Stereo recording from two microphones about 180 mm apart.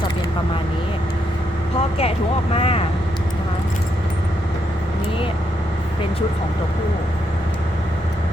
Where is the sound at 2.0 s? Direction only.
30° left (ahead or behind).